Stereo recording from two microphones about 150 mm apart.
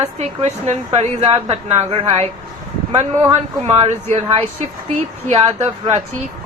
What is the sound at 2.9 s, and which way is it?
Speech, 25° right (ahead or behind).